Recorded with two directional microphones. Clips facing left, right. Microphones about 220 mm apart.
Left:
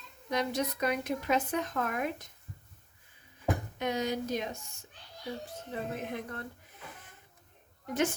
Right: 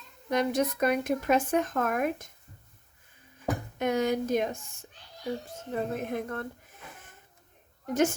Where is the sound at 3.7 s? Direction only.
50° right (ahead or behind).